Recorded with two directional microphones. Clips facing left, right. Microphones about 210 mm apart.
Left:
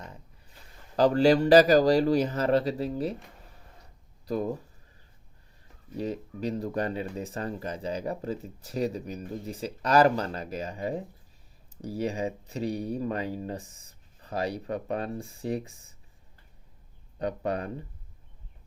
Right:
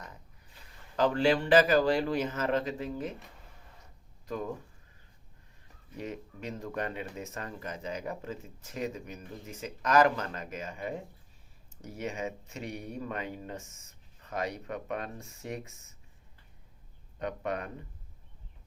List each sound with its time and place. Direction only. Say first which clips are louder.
0.9 s speech: left 5 dB; 40° left (ahead or behind)
4.3 s speech: left 6 dB; 35° left (ahead or behind)
6.0 s speech: left 7 dB; 35° left (ahead or behind)
17.2 s speech: left 4 dB; 35° left (ahead or behind)